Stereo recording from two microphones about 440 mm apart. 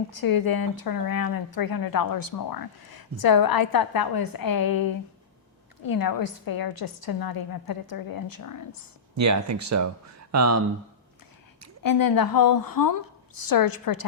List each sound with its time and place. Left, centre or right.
0.2 s speech: left
9.1 s speech: right
11.8 s speech: left